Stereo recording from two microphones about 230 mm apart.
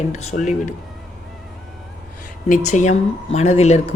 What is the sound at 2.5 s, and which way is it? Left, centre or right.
Speech, left.